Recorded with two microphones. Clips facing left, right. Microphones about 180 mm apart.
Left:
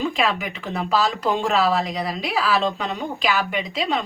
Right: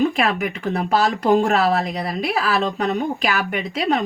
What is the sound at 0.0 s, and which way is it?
Speech, 55° right (ahead or behind).